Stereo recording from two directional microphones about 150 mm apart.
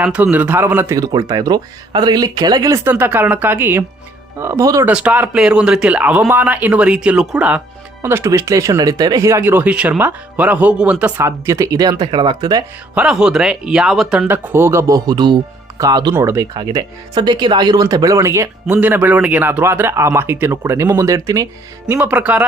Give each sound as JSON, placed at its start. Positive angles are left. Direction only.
{"t": 0.0, "sound": "speech", "side_deg": -10}
{"t": 4.9, "sound": "speech", "side_deg": -5}
{"t": 12.9, "sound": "speech", "side_deg": -5}
{"t": 14.3, "sound": "speech", "side_deg": -15}
{"t": 16.1, "sound": "speech", "side_deg": -15}
{"t": 16.6, "sound": "speech", "side_deg": -30}